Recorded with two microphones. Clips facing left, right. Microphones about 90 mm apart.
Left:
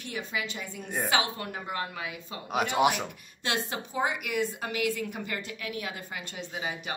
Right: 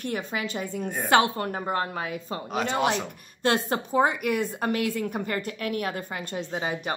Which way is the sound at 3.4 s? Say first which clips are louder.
Right 7 dB; 45° right (ahead or behind).